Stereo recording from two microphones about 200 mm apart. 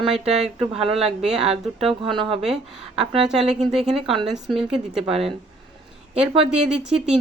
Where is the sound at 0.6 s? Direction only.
30° right (ahead or behind).